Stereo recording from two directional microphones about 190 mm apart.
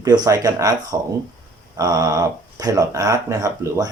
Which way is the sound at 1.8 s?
20° right (ahead or behind).